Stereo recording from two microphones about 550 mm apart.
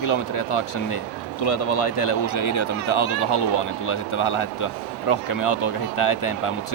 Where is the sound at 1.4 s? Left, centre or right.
Left.